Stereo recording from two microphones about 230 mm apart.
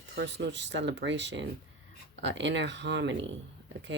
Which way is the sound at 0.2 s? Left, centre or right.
Right.